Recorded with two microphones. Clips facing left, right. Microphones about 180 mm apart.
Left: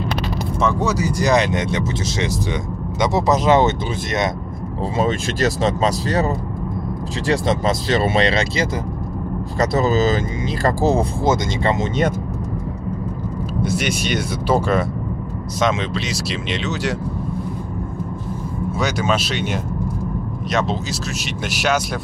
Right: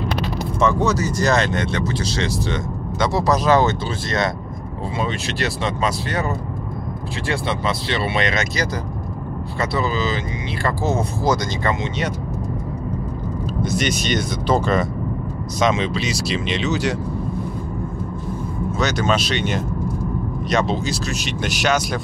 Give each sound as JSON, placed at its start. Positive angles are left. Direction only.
{"t": 0.6, "sound": "speech", "side_deg": 5}
{"t": 4.9, "sound": "speech", "side_deg": 40}
{"t": 9.6, "sound": "speech", "side_deg": 40}
{"t": 13.6, "sound": "speech", "side_deg": 10}
{"t": 18.8, "sound": "speech", "side_deg": 10}